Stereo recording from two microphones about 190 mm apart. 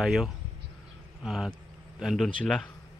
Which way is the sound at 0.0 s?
Centre (ahead or behind).